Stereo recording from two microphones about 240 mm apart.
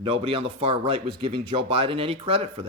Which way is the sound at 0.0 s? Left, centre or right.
Right.